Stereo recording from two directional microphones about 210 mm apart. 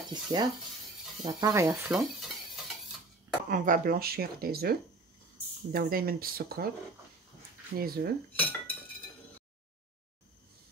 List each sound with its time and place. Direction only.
0.1 s speech: 20° right (ahead or behind)
2.0 s stir: centre (ahead or behind)
3.4 s speech: 40° right (ahead or behind)
7.7 s speech: 45° right (ahead or behind)
8.4 s cutlery: 10° left (ahead or behind)